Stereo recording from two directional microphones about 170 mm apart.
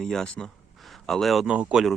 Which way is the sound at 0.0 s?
5° left (ahead or behind).